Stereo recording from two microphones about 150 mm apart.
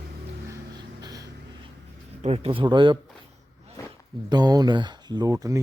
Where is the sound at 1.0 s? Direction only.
25° right (ahead or behind).